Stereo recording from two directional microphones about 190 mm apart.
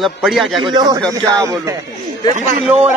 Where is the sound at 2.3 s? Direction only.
40° right (ahead or behind).